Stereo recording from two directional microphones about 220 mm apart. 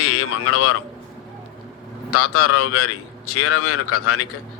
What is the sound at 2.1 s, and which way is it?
Speech, 90° left.